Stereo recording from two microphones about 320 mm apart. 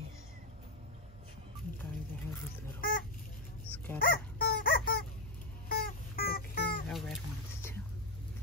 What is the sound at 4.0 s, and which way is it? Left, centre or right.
Dog, left.